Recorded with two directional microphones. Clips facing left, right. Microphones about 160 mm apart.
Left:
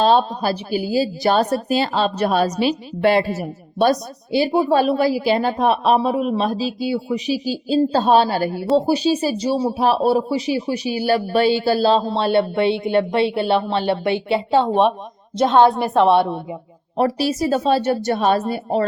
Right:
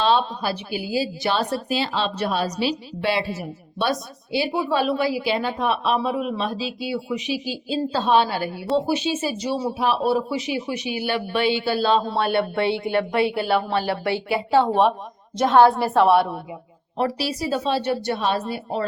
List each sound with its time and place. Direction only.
0.0 s a woman's voice: 40° left (ahead or behind)
12.1 s speech: 25° left (ahead or behind)
17.0 s a woman's voice: 45° left (ahead or behind)